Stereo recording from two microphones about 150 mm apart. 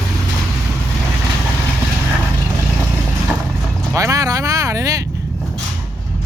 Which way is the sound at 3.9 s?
20° right (ahead or behind).